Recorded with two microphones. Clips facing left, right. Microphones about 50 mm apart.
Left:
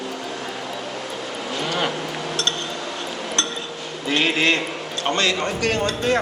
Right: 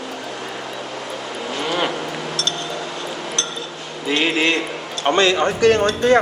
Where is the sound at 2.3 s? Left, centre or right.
Left.